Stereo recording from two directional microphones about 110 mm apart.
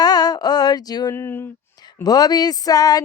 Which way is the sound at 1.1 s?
20° left (ahead or behind).